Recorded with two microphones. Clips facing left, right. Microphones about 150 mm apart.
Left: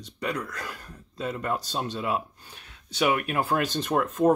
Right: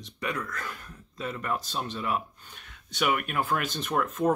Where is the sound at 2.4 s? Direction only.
10° left (ahead or behind).